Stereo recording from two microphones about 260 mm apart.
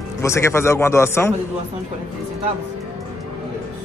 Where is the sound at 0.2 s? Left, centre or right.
Centre.